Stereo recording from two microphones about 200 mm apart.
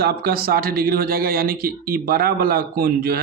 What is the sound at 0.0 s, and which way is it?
Speech, 50° right (ahead or behind).